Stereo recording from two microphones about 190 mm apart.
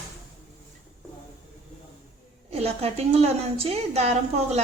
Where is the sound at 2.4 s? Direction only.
35° right (ahead or behind).